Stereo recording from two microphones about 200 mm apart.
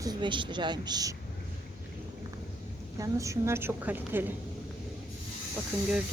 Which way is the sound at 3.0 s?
15° right (ahead or behind).